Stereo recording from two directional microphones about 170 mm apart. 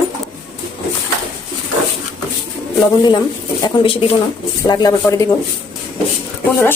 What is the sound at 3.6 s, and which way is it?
Speech, 30° left (ahead or behind).